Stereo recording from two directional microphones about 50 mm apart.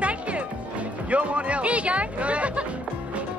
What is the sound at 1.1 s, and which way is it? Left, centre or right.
Speech, right.